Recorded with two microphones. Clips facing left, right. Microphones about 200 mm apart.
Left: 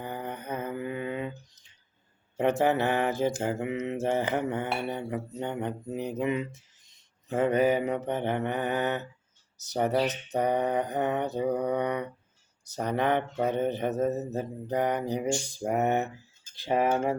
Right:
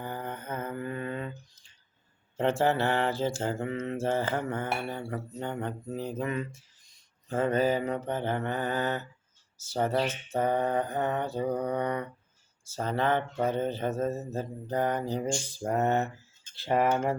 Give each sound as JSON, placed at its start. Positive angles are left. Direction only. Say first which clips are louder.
{"t": 0.0, "sound": "mantra", "louder": "left 1 dB", "side_deg": 15}
{"t": 9.6, "sound": "speech", "louder": "left 2 dB", "side_deg": 20}